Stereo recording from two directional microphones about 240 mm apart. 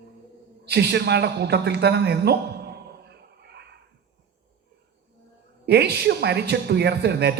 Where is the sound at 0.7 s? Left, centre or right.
Right.